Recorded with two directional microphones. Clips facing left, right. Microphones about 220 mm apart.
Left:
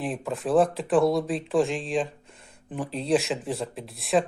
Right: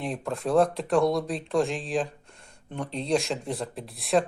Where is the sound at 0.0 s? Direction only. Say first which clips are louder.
Left 1 dB; centre (ahead or behind).